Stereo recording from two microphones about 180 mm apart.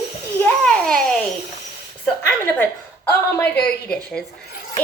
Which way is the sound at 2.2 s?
10° left (ahead or behind).